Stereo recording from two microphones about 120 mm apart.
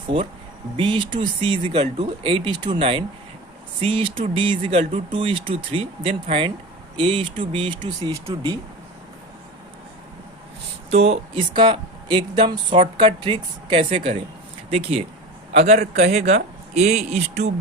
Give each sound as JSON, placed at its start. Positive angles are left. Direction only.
{"t": 0.1, "sound": "speech", "side_deg": -60}
{"t": 0.8, "sound": "speech", "side_deg": -45}
{"t": 10.9, "sound": "speech", "side_deg": -60}
{"t": 15.5, "sound": "speech", "side_deg": -65}